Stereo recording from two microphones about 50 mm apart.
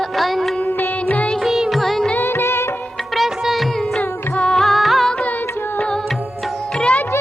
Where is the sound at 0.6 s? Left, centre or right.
Left.